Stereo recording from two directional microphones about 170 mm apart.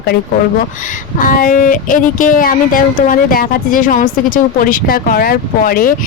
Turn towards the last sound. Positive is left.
turn(degrees=60)  # may be behind; listen again after turning